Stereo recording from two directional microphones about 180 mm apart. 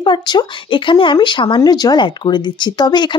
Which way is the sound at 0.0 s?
25° left (ahead or behind).